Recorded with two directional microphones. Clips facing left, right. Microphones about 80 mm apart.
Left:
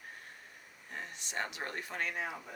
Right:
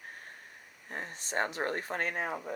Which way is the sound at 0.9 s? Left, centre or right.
Right.